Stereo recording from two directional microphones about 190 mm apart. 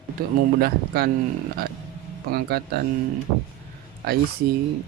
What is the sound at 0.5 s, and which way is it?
Speech, 55° right (ahead or behind).